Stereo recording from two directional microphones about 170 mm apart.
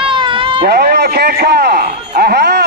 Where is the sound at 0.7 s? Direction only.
65° right (ahead or behind).